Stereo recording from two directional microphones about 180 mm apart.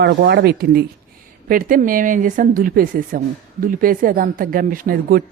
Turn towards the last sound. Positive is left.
turn(degrees=-55)  # may be behind; listen again after turning